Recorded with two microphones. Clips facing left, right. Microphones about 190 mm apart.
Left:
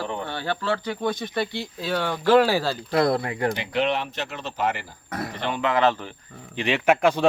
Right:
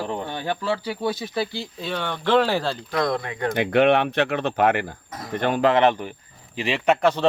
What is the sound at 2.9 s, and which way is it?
Speech, 30° left (ahead or behind).